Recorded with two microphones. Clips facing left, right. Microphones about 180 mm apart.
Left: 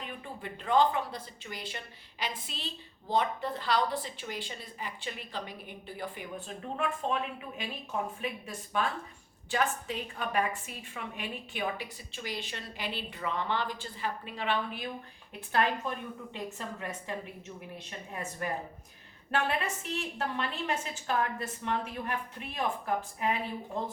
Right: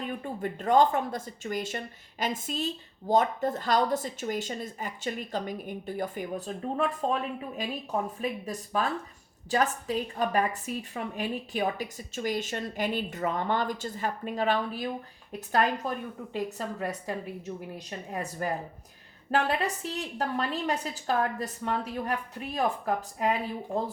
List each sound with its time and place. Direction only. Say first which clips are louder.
0.0 s a woman's voice: right 8 dB; 45° right (ahead or behind)